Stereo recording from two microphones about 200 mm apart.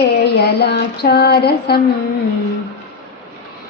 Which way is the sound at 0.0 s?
55° left (ahead or behind).